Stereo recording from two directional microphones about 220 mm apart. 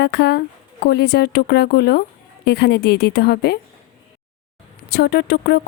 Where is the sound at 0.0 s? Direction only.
50° left (ahead or behind).